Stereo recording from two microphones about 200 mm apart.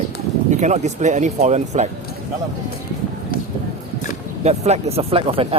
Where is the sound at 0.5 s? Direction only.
35° right (ahead or behind).